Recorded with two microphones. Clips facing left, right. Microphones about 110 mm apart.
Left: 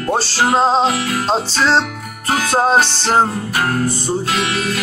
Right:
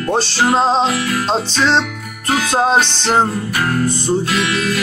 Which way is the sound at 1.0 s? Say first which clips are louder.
Right 1 dB; 35° left (ahead or behind).